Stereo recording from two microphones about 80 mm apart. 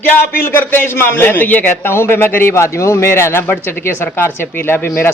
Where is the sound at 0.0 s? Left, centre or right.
Left.